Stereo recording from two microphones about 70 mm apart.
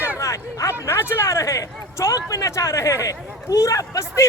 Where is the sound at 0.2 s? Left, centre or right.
Left.